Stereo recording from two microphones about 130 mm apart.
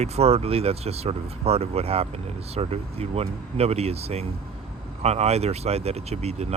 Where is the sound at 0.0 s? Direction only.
55° right (ahead or behind).